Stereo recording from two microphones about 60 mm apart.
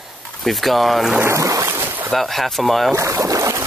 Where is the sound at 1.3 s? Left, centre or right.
Right.